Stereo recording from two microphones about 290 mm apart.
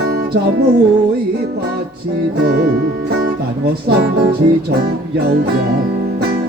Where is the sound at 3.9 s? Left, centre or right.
Right.